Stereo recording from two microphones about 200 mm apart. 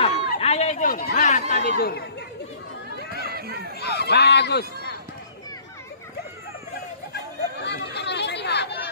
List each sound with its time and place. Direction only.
0.0 s run: 30° left (ahead or behind)
1.1 s chatter: 35° left (ahead or behind)
1.5 s speech: 50° left (ahead or behind)
3.3 s a sound: 50° right (ahead or behind)
3.8 s speech: 55° left (ahead or behind)
7.2 s chatter: 55° left (ahead or behind)